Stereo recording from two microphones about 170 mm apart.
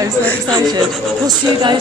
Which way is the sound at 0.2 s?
10° left (ahead or behind).